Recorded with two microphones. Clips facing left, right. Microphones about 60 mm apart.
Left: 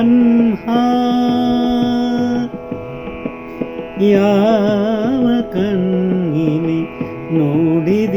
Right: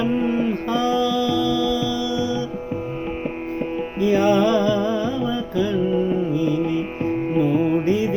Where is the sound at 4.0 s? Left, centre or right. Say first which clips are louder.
Left 6 dB; left.